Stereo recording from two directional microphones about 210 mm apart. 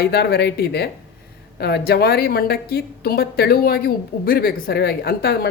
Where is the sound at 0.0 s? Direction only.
50° left (ahead or behind).